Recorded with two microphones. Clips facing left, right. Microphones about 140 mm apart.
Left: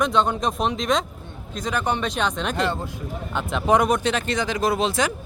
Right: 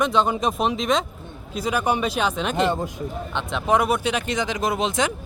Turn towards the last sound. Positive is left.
turn(degrees=-20)  # may be behind; listen again after turning